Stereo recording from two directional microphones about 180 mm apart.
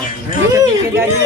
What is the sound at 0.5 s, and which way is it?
Speech, 20° right (ahead or behind).